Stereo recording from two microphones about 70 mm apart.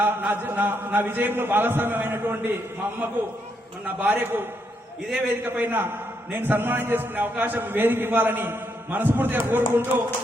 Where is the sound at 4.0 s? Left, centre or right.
Right.